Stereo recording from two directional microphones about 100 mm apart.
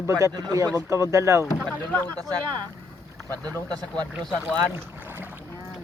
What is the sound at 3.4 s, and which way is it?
Speech, 10° left (ahead or behind).